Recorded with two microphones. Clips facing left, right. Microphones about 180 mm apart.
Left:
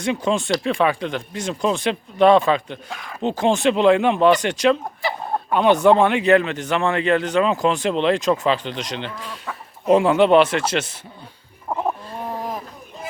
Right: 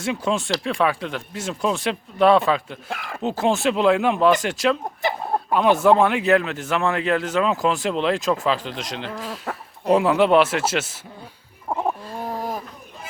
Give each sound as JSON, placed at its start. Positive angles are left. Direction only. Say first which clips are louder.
{"t": 0.0, "sound": "speech", "louder": "left 2 dB", "side_deg": 0}
{"t": 9.5, "sound": "chicken", "louder": "right 2 dB", "side_deg": -60}
{"t": 9.8, "sound": "speech", "louder": "left 2 dB", "side_deg": 0}
{"t": 11.7, "sound": "fowl", "louder": "even", "side_deg": -10}